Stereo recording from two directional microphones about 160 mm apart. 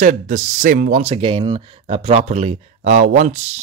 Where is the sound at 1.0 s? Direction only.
35° right (ahead or behind).